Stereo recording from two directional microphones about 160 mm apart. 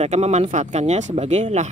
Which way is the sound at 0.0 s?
45° right (ahead or behind).